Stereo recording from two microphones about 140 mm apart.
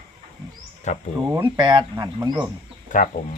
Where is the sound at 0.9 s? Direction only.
55° left (ahead or behind).